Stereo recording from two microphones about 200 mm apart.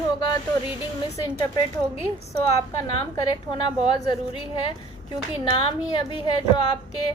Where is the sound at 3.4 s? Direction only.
25° left (ahead or behind).